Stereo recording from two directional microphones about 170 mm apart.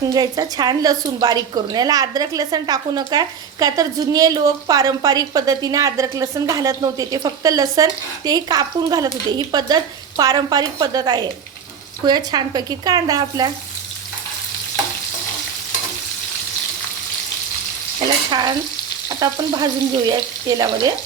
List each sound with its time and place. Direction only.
0.1 s a woman's voice: 20° right (ahead or behind)
18.3 s frying: 25° right (ahead or behind)
19.2 s a woman's voice: 20° right (ahead or behind)